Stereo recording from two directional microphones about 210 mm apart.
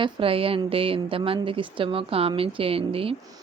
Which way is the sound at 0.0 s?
25° right (ahead or behind).